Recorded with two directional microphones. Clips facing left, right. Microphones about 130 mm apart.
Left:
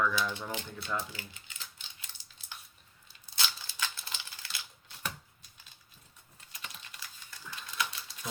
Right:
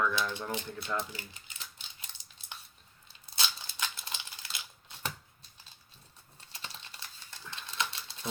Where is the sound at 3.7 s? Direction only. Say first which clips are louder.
Even; 20° right (ahead or behind).